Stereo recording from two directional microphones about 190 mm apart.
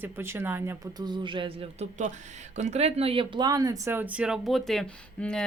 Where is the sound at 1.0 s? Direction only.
25° right (ahead or behind).